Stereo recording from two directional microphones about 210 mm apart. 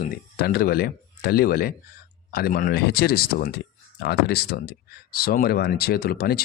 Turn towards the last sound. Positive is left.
turn(degrees=45)  # may be behind; listen again after turning